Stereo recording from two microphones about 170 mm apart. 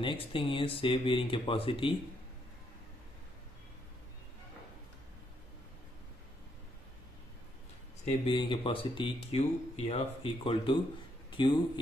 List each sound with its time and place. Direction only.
0.0 s speech: 35° left (ahead or behind)
8.0 s a man's voice: 30° left (ahead or behind)